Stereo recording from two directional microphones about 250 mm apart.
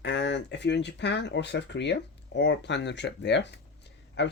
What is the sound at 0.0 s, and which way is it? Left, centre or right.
Speech, left.